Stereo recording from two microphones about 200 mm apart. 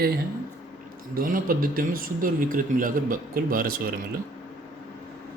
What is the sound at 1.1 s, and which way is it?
Speech, 45° right (ahead or behind).